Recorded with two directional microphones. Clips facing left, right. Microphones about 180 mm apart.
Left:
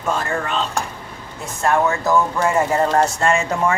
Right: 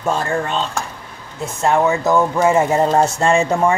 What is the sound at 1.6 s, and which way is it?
Speech, 20° right (ahead or behind).